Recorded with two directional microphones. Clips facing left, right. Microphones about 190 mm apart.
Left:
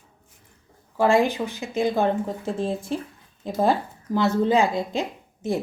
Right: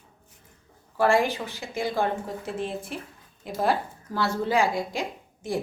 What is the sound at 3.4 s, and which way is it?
A woman's voice, 25° left (ahead or behind).